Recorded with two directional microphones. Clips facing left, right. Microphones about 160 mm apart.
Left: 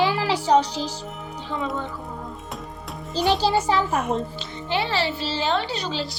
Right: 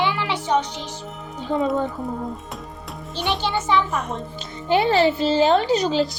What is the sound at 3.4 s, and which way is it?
Speech, 35° left (ahead or behind).